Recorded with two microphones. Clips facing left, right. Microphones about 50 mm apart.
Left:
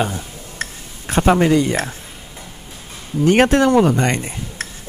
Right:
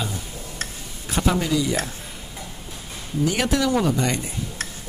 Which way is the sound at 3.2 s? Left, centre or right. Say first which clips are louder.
Left 9 dB; left.